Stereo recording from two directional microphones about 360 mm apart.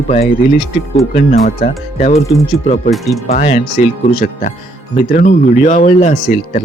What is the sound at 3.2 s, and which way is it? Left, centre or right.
Speech, centre.